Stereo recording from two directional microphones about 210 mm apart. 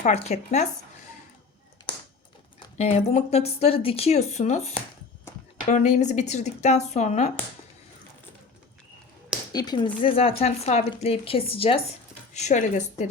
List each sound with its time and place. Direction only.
0.0 s speech: 30° left (ahead or behind)
1.9 s a sound: 25° left (ahead or behind)
2.6 s speech: 30° left (ahead or behind)
9.5 s speech: 20° left (ahead or behind); by 13.1 s 35° left (ahead or behind)